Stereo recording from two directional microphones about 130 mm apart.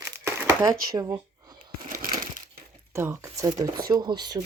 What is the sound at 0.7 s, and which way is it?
Speech, 30° right (ahead or behind).